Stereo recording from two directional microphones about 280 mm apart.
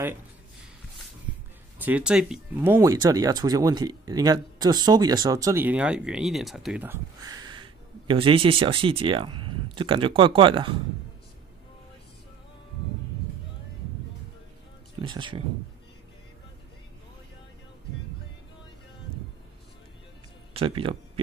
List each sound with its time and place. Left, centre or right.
1.8 s speech: centre
15.0 s speech: centre
20.5 s speech: centre